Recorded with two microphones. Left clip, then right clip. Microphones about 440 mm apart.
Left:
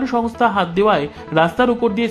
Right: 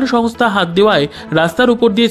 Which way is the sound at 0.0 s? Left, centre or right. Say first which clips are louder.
Right 3 dB; centre.